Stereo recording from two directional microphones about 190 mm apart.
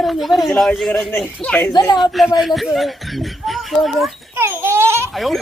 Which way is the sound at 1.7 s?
20° left (ahead or behind).